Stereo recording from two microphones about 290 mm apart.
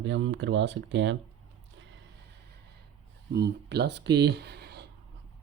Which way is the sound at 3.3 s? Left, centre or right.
Right.